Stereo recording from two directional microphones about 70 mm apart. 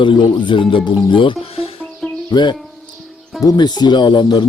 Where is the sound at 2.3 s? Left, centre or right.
Left.